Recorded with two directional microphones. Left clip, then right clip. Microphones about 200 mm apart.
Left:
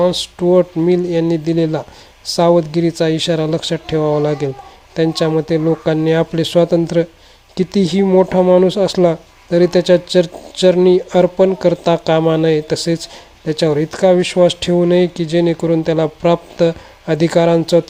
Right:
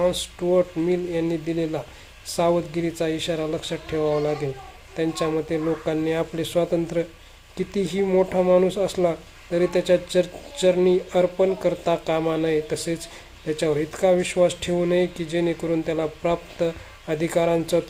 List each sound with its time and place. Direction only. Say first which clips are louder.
0.0 s speech: left 8 dB; 35° left (ahead or behind)